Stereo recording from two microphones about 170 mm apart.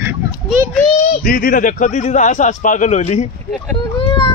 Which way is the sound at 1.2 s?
55° left (ahead or behind).